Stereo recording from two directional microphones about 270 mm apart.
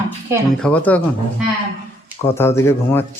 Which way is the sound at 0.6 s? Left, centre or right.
Centre.